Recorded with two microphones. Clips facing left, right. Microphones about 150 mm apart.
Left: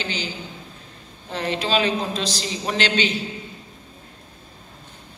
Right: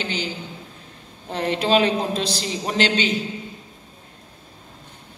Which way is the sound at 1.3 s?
55° right (ahead or behind).